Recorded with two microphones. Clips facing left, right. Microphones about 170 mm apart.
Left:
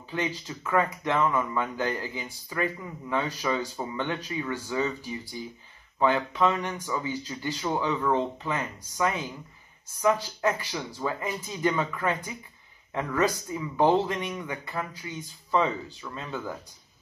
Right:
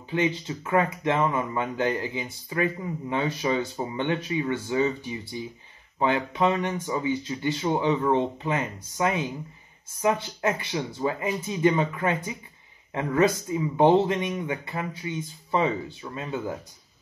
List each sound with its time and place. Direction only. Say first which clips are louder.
0.1 s speech: right 5 dB; 20° right (ahead or behind)